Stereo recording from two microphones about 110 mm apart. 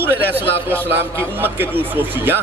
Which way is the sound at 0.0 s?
20° right (ahead or behind).